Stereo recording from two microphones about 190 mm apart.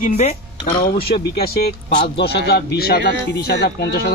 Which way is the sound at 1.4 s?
55° left (ahead or behind).